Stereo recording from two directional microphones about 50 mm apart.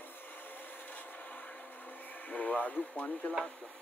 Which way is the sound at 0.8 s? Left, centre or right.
Left.